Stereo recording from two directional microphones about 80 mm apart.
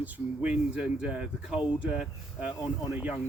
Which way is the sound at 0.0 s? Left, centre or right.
Centre.